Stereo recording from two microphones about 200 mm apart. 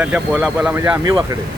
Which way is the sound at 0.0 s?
5° right (ahead or behind).